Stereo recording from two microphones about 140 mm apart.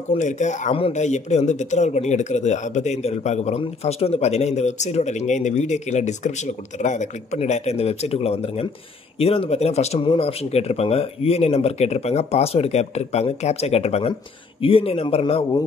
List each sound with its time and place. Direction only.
0.2 s speech: 60° left (ahead or behind)